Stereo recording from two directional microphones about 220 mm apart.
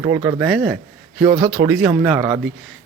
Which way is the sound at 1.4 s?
30° right (ahead or behind).